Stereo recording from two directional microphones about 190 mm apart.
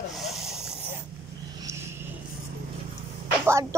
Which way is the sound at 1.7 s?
15° right (ahead or behind).